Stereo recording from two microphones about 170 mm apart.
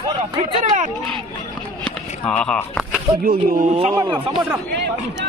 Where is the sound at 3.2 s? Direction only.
60° right (ahead or behind).